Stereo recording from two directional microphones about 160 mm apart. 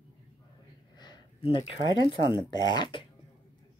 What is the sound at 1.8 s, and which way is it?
Speech, 30° right (ahead or behind).